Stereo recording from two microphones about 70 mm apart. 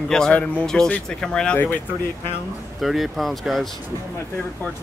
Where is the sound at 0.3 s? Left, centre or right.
Centre.